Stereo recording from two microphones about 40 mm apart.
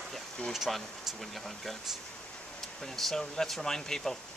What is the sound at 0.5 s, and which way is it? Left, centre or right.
Speech, centre.